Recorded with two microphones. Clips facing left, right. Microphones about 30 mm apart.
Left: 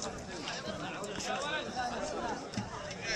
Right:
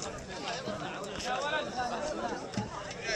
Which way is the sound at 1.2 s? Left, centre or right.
Centre.